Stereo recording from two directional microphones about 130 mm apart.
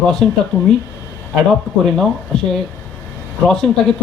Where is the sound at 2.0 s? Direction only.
5° left (ahead or behind).